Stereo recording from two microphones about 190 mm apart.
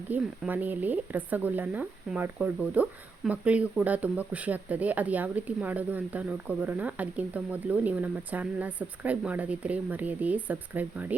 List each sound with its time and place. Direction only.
0.1 s speech: 10° right (ahead or behind)